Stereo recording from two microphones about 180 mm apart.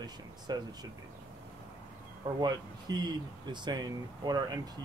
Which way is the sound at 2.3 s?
20° right (ahead or behind).